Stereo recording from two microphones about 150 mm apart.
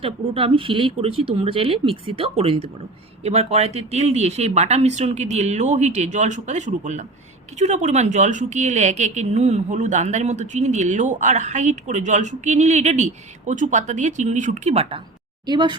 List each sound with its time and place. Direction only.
0.0 s a woman's voice: 35° right (ahead or behind)